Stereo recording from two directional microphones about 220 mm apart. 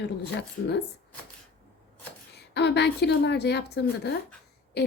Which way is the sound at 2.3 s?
50° left (ahead or behind).